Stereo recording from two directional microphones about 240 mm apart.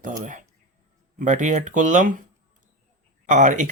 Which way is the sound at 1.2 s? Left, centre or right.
Right.